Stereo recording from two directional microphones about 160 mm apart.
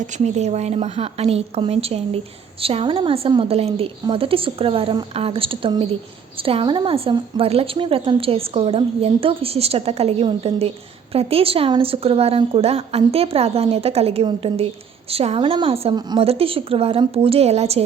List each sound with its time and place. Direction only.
0.3 s a woman's voice: 45° right (ahead or behind)